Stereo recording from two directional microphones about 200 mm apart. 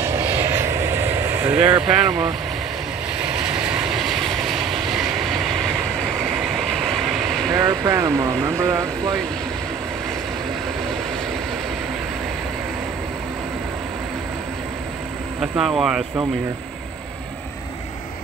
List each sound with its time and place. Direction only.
0.2 s vehicle: 10° right (ahead or behind)
7.5 s speech: 15° right (ahead or behind)
15.4 s speech: 5° right (ahead or behind)